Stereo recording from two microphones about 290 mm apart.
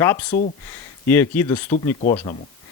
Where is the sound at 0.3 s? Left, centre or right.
Left.